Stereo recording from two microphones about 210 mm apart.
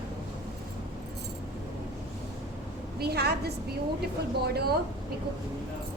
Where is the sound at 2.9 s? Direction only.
50° right (ahead or behind).